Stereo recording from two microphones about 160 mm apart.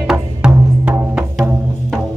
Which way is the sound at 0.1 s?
5° right (ahead or behind).